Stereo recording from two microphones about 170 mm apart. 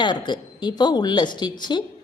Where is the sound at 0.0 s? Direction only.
25° left (ahead or behind).